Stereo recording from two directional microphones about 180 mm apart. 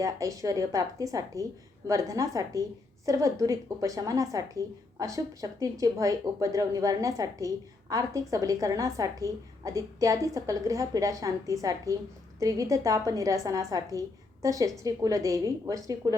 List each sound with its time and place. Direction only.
0.0 s a woman's voice: 20° right (ahead or behind)